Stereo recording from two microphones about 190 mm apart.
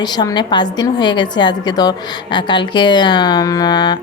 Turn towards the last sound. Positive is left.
turn(degrees=20)  # may be behind; listen again after turning